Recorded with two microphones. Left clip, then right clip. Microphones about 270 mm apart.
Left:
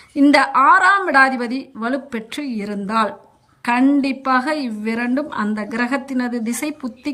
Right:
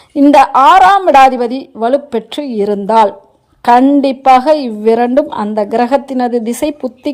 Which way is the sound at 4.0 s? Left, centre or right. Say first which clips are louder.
Right 11 dB; centre.